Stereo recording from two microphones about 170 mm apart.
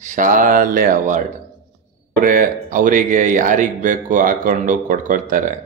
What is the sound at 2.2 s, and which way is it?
A man's voice, 55° right (ahead or behind).